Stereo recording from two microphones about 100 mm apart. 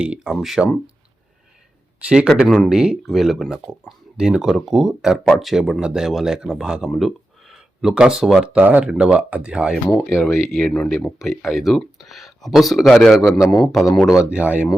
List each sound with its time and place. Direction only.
0.0 s speech: 10° right (ahead or behind)
2.0 s speech: 10° right (ahead or behind)
10.1 s speech: 30° left (ahead or behind)
10.6 s speech: 5° left (ahead or behind)
14.1 s speech: 10° right (ahead or behind)